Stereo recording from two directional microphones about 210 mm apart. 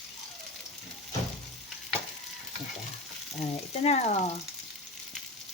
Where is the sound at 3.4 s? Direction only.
30° left (ahead or behind).